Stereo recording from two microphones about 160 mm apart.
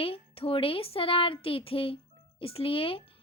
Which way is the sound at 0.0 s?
35° left (ahead or behind).